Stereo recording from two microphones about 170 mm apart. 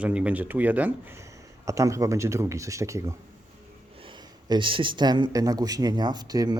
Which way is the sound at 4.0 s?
30° right (ahead or behind).